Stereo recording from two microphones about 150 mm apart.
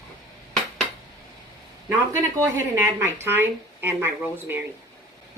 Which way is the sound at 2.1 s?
15° right (ahead or behind).